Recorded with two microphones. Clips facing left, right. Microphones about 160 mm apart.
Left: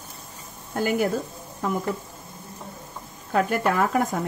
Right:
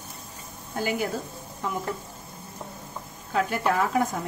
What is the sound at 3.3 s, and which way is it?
Speech, 50° left (ahead or behind).